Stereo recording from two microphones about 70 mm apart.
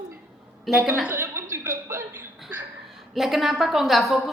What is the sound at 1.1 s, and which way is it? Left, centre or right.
Chuckle, right.